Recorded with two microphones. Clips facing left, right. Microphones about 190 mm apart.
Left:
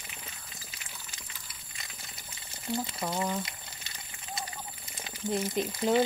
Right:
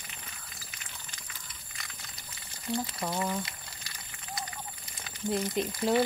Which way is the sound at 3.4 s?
25° left (ahead or behind).